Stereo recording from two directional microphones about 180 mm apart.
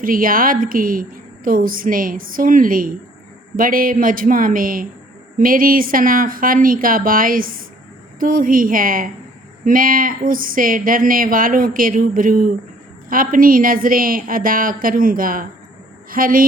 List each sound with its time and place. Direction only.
0.0 s a woman's voice: 50° right (ahead or behind)